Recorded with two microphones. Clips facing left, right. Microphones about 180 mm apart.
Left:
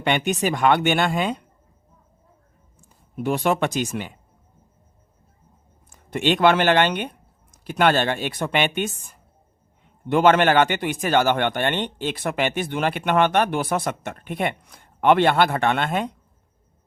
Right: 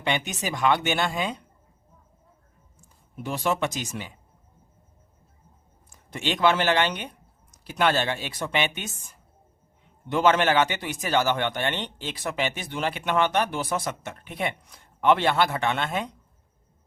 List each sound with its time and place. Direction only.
0.0 s a man's voice: 60° left (ahead or behind)
3.2 s a man's voice: 60° left (ahead or behind)
6.1 s a man's voice: 60° left (ahead or behind)
10.1 s a man's voice: 60° left (ahead or behind)